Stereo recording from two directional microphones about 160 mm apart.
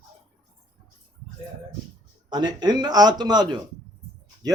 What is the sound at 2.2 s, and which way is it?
Speech, 25° right (ahead or behind).